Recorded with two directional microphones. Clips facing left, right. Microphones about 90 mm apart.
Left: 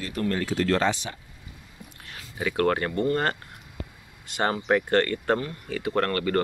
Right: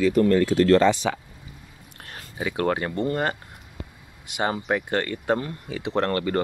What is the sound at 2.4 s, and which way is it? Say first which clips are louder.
Speech: left 1 dB; 15° right (ahead or behind).